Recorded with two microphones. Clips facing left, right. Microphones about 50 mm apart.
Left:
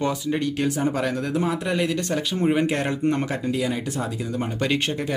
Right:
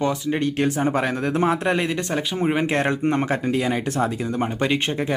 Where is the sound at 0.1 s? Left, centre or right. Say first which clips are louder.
Right 2 dB; right.